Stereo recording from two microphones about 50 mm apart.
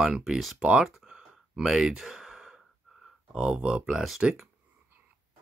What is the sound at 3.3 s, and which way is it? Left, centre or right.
Speech, centre.